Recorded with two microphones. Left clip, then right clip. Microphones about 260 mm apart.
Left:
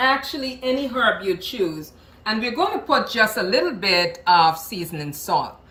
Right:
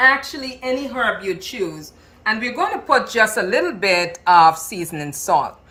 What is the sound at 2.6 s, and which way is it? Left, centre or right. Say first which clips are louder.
Speech: right 2 dB; centre.